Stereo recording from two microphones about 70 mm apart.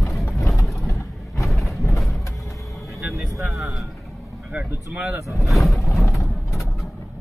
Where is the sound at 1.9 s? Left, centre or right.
Centre.